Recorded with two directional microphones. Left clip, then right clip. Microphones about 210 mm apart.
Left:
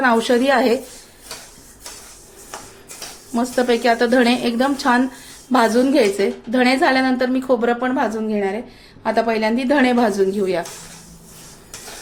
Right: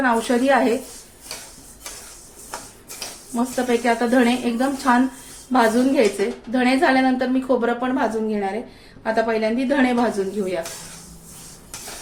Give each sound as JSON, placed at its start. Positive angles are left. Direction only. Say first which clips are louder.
{"t": 0.0, "sound": "a woman's voice", "louder": "left 3 dB", "side_deg": 45}
{"t": 3.3, "sound": "a woman's voice", "louder": "left 4 dB", "side_deg": 50}